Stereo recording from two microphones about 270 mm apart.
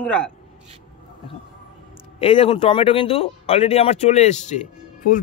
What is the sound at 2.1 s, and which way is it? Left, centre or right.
A man's voice, left.